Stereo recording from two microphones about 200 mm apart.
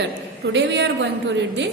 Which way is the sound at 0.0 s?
60° right (ahead or behind).